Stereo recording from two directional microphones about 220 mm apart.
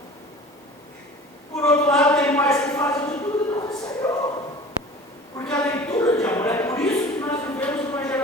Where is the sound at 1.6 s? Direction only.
5° left (ahead or behind).